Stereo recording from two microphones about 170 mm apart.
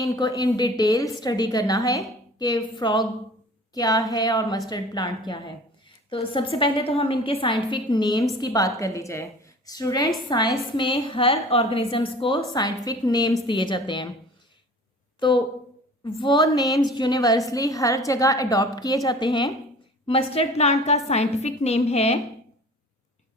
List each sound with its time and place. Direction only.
0.0 s a woman's voice: 20° left (ahead or behind)
15.2 s a woman's voice: 30° left (ahead or behind)